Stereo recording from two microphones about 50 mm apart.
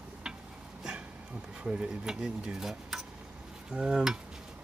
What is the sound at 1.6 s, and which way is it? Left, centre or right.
Speech, right.